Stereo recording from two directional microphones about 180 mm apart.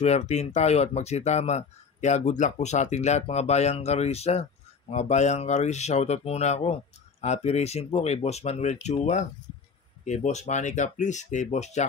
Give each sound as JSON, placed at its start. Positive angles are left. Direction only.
{"t": 0.0, "sound": "speech", "side_deg": 40}